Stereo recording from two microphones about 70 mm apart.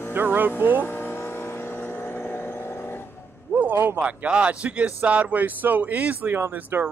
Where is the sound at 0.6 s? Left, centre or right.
Right.